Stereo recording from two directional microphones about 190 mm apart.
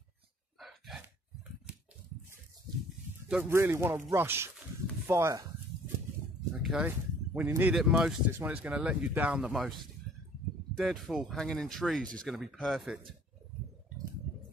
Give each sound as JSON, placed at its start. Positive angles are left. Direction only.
{"t": 0.6, "sound": "gasp", "side_deg": 0}
{"t": 3.3, "sound": "speech", "side_deg": -10}
{"t": 6.6, "sound": "speech", "side_deg": -5}
{"t": 10.8, "sound": "speech", "side_deg": 0}